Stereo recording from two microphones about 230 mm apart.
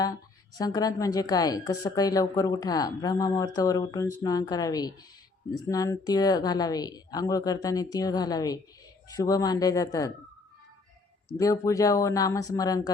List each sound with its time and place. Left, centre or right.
0.6 s a woman's voice: centre
11.3 s a woman's voice: centre